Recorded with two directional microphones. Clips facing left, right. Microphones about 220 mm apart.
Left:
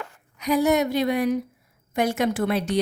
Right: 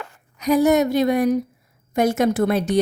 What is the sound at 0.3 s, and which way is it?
A woman's voice, 45° right (ahead or behind).